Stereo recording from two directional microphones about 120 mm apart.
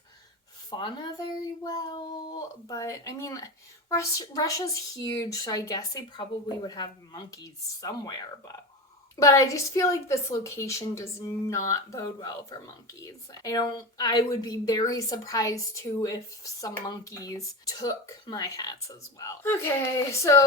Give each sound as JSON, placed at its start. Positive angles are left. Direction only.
{"t": 0.7, "sound": "speech", "side_deg": 40}
{"t": 9.1, "sound": "a woman's voice", "side_deg": 25}